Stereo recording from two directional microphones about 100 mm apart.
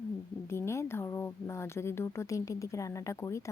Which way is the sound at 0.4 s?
25° left (ahead or behind).